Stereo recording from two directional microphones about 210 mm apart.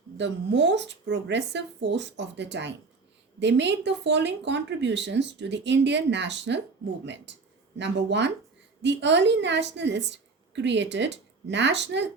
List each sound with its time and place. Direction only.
0.2 s a woman's voice: 55° right (ahead or behind)